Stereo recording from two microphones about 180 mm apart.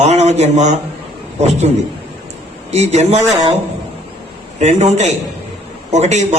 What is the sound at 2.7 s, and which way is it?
Speech, 40° right (ahead or behind).